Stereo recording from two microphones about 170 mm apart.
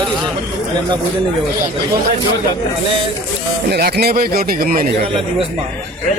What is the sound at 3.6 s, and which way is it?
Speech, 75° right (ahead or behind).